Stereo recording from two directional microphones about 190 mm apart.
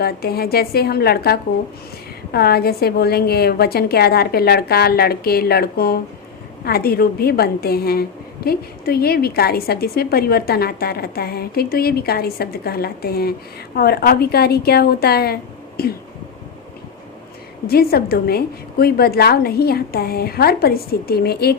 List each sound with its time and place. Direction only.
0.0 s a woman's voice: 55° left (ahead or behind)
17.7 s a woman's voice: 55° left (ahead or behind)